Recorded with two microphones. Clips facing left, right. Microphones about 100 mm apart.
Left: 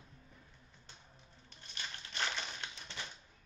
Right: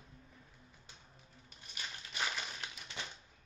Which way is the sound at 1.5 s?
5° right (ahead or behind).